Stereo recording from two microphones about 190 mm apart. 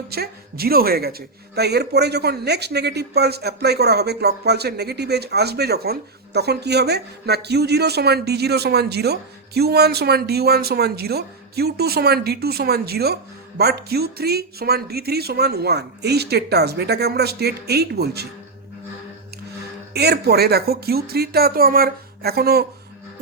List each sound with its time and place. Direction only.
0.1 s a woman's voice: 55° right (ahead or behind)
19.9 s speech: 60° right (ahead or behind)